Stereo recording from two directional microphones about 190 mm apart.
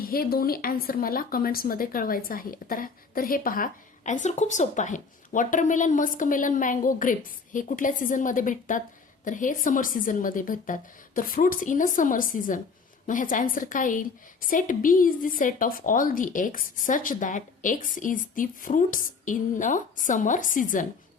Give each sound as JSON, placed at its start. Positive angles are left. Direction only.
{"t": 0.0, "sound": "a woman's voice", "side_deg": 50}